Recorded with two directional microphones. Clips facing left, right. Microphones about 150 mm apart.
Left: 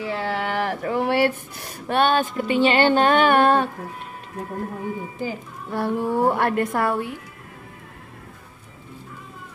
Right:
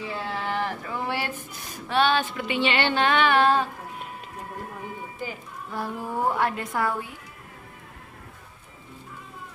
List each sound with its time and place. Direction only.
0.0 s speech: 75° left (ahead or behind); by 3.7 s 55° left (ahead or behind)
5.7 s a woman's voice: 70° left (ahead or behind)